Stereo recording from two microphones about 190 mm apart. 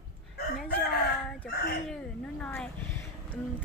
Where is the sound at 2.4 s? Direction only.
5° left (ahead or behind).